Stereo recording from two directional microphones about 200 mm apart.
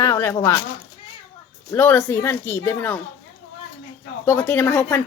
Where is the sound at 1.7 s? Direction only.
10° left (ahead or behind).